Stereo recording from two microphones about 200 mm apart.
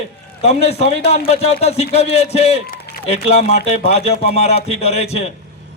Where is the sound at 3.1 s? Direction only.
30° left (ahead or behind).